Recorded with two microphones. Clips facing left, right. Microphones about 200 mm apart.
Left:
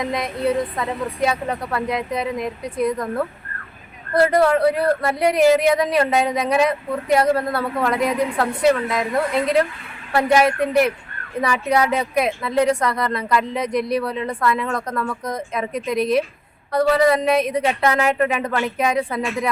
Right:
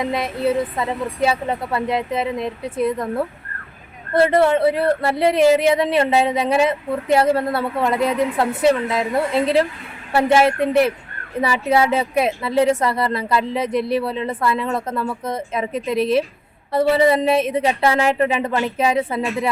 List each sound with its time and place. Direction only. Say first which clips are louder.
0.2 s a woman's voice: even; 5° right (ahead or behind)
1.7 s speech: right 2 dB; 25° right (ahead or behind)
2.6 s a woman's voice: right 1 dB; 5° right (ahead or behind)
4.1 s speech: right 1 dB; 25° right (ahead or behind)
5.3 s a woman's voice: even; centre (ahead or behind)
5.6 s speech: right 1 dB; 25° right (ahead or behind)
8.0 s a woman's voice: right 1 dB; centre (ahead or behind)
8.7 s speech: right 1 dB; 25° right (ahead or behind)
10.7 s a woman's voice: right 1 dB; centre (ahead or behind)
11.5 s speech: right 2 dB; 25° right (ahead or behind)
14.9 s a woman's voice: right 1 dB; 5° right (ahead or behind)
15.5 s speech: right 1 dB; 25° right (ahead or behind)
16.0 s a woman's voice: right 1 dB; centre (ahead or behind)
16.7 s speech: right 1 dB; 25° right (ahead or behind)